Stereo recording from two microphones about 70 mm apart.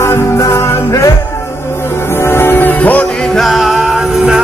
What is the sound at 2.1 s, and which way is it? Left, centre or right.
Music, left.